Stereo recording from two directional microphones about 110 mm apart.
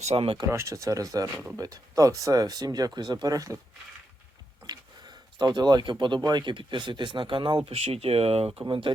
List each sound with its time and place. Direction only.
0.0 s speech: 65° right (ahead or behind)
0.5 s speech: 30° right (ahead or behind)
4.6 s speech: 40° right (ahead or behind); by 8.4 s 65° right (ahead or behind)
8.6 s speech: 50° right (ahead or behind)